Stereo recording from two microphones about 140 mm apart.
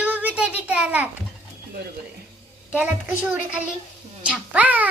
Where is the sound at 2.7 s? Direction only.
10° right (ahead or behind).